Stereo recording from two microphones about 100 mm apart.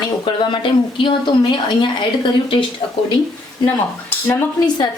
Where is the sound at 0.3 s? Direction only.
55° left (ahead or behind).